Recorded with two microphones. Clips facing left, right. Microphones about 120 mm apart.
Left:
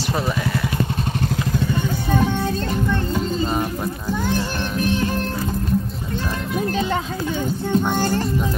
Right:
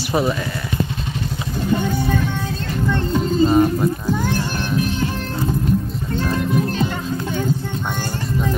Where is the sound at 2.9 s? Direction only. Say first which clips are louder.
Right 2 dB; centre (ahead or behind).